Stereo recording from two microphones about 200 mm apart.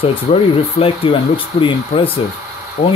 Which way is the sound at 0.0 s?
30° left (ahead or behind).